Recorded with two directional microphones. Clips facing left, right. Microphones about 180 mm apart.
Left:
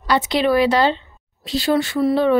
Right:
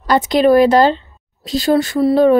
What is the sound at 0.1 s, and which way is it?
Speech, 45° right (ahead or behind).